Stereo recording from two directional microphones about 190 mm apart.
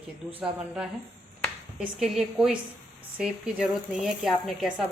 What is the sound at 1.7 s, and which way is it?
A woman's voice, centre (ahead or behind).